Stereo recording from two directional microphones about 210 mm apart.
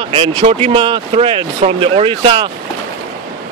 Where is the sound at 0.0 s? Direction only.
25° right (ahead or behind).